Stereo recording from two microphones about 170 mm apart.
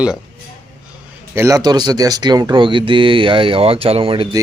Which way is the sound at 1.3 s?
20° right (ahead or behind).